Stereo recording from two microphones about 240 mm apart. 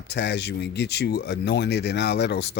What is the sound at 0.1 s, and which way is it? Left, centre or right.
Speech, left.